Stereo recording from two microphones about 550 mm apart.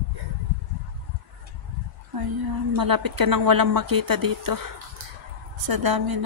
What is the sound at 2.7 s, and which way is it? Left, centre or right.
Speech, right.